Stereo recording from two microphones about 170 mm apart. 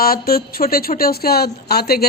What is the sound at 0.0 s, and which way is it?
A woman's voice, 60° left (ahead or behind).